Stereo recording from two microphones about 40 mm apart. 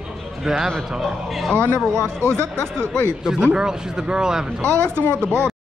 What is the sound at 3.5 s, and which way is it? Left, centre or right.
Speech, centre.